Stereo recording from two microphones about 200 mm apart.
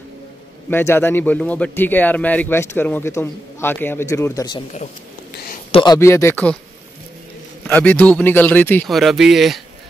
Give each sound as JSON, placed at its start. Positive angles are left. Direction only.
{"t": 0.7, "sound": "speech", "side_deg": 10}
{"t": 5.7, "sound": "a man's voice", "side_deg": 25}
{"t": 5.9, "sound": "speech", "side_deg": 15}
{"t": 7.6, "sound": "speech", "side_deg": 10}